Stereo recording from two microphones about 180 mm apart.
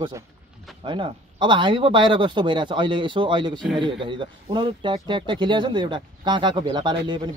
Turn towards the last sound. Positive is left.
turn(degrees=-25)  # may be behind; listen again after turning